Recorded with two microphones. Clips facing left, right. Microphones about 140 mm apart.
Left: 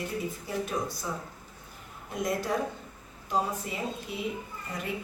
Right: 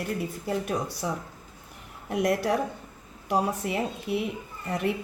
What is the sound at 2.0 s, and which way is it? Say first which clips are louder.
A woman's voice: right 6 dB; 70° right (ahead or behind).